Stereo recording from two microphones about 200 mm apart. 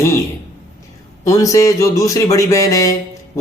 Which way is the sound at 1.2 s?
15° left (ahead or behind).